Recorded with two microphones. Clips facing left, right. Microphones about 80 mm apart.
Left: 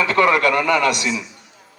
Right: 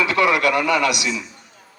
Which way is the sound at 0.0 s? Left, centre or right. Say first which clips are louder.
Left 2 dB; left.